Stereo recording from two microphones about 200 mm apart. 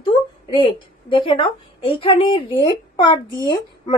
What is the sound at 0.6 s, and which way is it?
A woman's voice, 25° left (ahead or behind).